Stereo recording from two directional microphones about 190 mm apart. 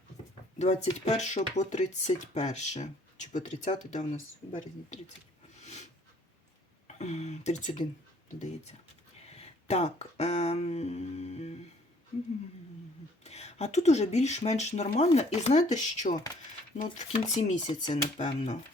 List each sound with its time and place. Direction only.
0.6 s speech: 35° left (ahead or behind)
5.5 s a sound: 35° left (ahead or behind)
6.8 s speech: 35° left (ahead or behind)
9.3 s speech: 35° left (ahead or behind)
13.2 s speech: 35° left (ahead or behind)